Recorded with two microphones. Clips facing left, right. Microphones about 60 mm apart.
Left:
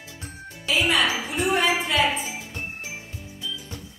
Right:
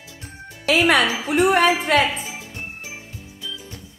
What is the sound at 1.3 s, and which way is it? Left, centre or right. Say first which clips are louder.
Speech: right 10 dB; right.